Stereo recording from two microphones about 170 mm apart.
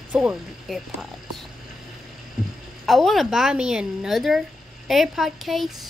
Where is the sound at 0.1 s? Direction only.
5° right (ahead or behind).